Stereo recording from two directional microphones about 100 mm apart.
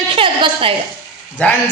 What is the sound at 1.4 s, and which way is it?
Speech, 15° left (ahead or behind).